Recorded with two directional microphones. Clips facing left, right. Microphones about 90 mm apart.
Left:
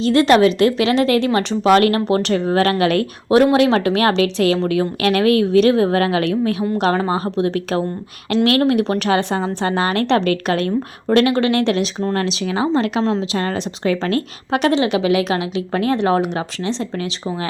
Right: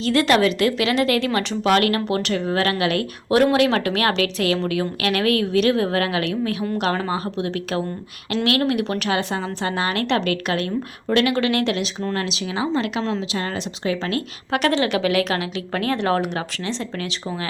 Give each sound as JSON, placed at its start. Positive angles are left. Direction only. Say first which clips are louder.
{"t": 0.0, "sound": "speech", "louder": "left 5 dB", "side_deg": 25}
{"t": 13.3, "sound": "speech", "louder": "left 5 dB", "side_deg": 45}
{"t": 14.6, "sound": "speech", "louder": "left 3 dB", "side_deg": 20}